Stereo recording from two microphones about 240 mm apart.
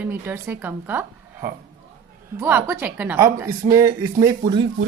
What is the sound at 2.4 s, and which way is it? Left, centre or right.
A woman's voice, centre.